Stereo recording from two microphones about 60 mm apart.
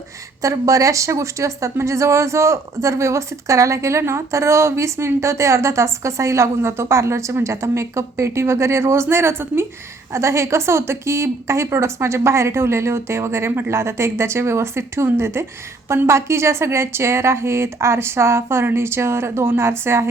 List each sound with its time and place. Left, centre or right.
0.4 s speech: right
10.1 s speech: right